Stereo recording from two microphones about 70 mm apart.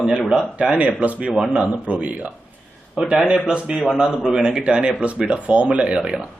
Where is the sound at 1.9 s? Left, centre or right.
Right.